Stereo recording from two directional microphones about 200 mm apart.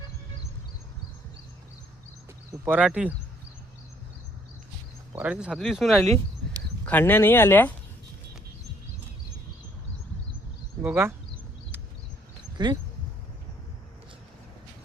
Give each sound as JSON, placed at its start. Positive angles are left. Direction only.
{"t": 2.5, "sound": "speech", "side_deg": -10}
{"t": 5.1, "sound": "speech", "side_deg": -5}
{"t": 6.8, "sound": "speech", "side_deg": 10}
{"t": 10.8, "sound": "speech", "side_deg": -10}
{"t": 12.6, "sound": "speech", "side_deg": -20}